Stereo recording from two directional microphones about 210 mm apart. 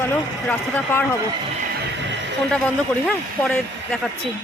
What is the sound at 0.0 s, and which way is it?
Speech, 10° left (ahead or behind).